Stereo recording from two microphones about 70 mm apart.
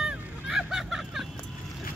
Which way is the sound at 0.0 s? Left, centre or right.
Centre.